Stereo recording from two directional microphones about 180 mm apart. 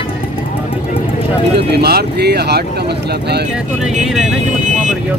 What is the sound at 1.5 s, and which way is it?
Speech, 60° right (ahead or behind).